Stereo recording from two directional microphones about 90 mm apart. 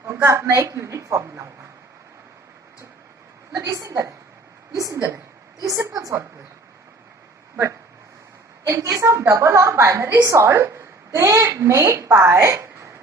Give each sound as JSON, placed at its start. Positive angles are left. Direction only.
{"t": 0.3, "sound": "a woman's voice", "side_deg": -35}
{"t": 3.5, "sound": "a woman's voice", "side_deg": -40}
{"t": 7.5, "sound": "a woman's voice", "side_deg": -30}